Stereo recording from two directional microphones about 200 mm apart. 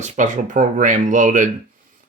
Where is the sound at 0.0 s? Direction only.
40° right (ahead or behind).